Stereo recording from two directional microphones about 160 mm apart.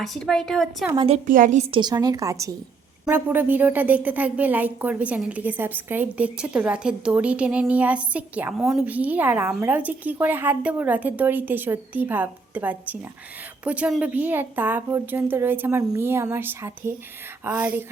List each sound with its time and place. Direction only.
0.0 s a woman's voice: centre (ahead or behind)
0.9 s a woman's voice: 35° right (ahead or behind)
1.3 s a woman's voice: 50° right (ahead or behind)
1.7 s a woman's voice: 25° right (ahead or behind)